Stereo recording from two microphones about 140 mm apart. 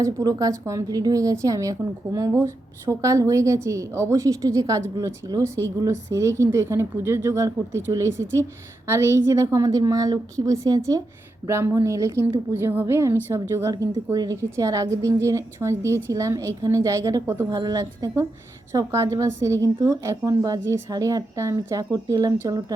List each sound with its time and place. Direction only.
0.0 s a woman's voice: 25° right (ahead or behind)